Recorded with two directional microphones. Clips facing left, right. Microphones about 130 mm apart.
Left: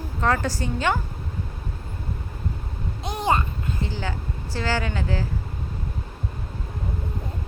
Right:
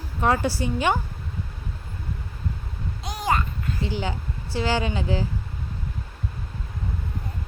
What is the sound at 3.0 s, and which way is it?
Babbling, 25° left (ahead or behind).